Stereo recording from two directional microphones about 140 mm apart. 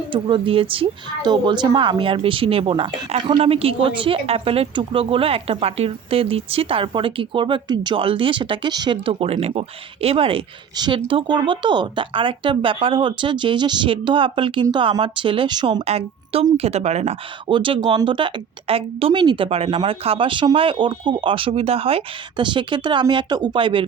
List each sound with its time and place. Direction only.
0.1 s speech: 35° right (ahead or behind)
15.8 s speech: 45° right (ahead or behind)
17.5 s speech: 35° right (ahead or behind)